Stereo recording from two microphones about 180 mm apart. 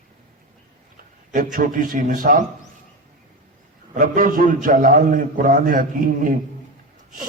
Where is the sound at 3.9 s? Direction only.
50° right (ahead or behind).